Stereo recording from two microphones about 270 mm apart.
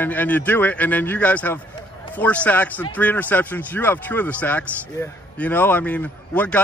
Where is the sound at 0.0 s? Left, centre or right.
Centre.